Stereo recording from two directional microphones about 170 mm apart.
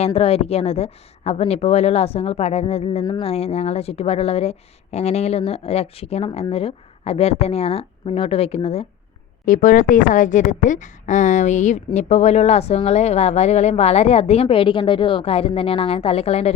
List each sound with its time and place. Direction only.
0.0 s speech: 35° left (ahead or behind)
9.5 s a woman's voice: 50° left (ahead or behind)